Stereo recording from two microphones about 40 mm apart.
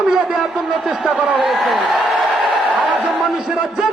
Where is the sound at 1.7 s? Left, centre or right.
Centre.